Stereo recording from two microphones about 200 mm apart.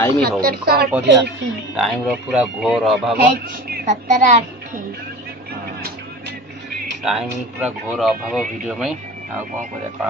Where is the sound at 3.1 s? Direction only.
50° right (ahead or behind).